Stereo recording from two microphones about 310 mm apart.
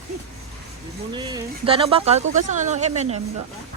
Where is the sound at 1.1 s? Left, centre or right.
Centre.